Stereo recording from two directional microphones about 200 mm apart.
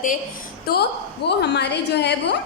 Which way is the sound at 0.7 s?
55° left (ahead or behind).